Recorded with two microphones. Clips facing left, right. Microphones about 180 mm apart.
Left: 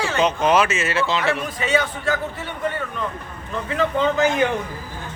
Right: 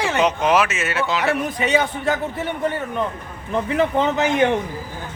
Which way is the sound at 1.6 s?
20° right (ahead or behind).